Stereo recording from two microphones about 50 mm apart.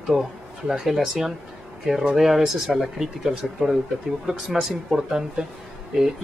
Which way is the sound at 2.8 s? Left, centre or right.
Centre.